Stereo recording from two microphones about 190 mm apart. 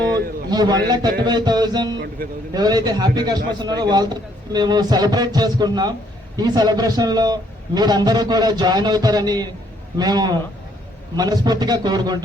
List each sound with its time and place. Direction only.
0.5 s a man's voice: 20° right (ahead or behind)